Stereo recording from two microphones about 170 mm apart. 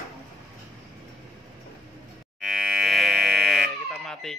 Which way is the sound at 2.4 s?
Centre (ahead or behind).